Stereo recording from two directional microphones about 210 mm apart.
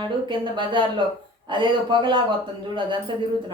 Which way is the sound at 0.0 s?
20° right (ahead or behind).